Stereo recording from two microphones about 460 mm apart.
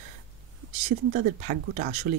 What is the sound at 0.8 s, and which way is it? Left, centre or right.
Speech, centre.